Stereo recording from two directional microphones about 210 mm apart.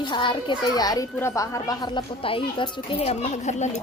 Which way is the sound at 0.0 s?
20° left (ahead or behind).